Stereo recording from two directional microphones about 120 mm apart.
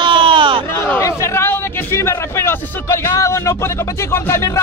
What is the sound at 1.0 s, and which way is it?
A man's voice, 25° left (ahead or behind).